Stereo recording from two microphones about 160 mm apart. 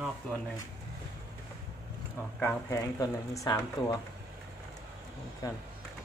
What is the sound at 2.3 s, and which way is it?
Speech, 10° left (ahead or behind).